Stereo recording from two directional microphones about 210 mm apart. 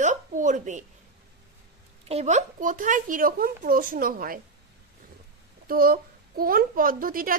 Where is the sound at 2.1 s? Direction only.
30° right (ahead or behind).